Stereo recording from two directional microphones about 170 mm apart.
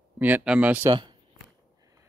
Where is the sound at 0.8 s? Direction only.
25° right (ahead or behind).